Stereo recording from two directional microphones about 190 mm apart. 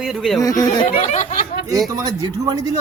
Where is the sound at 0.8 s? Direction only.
35° left (ahead or behind).